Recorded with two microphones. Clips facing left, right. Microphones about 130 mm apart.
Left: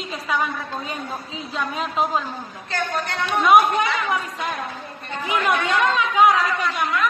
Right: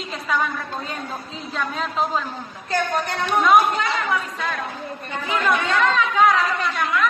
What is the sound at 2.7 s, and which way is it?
Speech, 40° right (ahead or behind).